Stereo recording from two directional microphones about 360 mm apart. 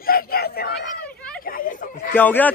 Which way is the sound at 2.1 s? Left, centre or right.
Centre.